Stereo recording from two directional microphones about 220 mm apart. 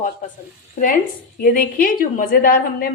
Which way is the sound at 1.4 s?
40° left (ahead or behind).